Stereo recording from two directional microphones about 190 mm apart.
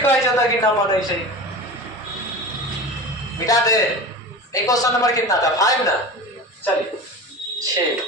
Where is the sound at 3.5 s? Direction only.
20° left (ahead or behind).